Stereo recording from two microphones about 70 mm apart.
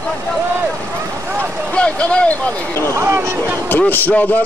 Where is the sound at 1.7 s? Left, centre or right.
Centre.